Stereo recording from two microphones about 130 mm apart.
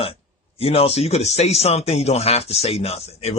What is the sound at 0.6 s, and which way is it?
Speech, 50° left (ahead or behind).